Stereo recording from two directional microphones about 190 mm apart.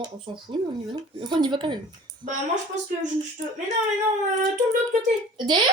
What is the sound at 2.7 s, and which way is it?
Speech, 40° right (ahead or behind).